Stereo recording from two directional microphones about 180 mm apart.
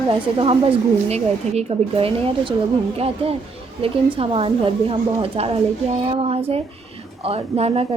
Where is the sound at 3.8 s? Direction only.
30° right (ahead or behind).